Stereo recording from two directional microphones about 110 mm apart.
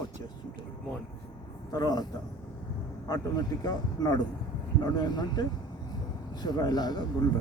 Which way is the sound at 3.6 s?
35° left (ahead or behind).